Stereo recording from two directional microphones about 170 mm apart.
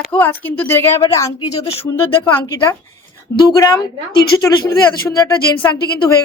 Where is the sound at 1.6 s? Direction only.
35° left (ahead or behind).